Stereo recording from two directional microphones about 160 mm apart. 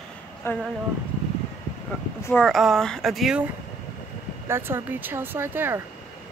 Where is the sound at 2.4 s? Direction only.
Centre (ahead or behind).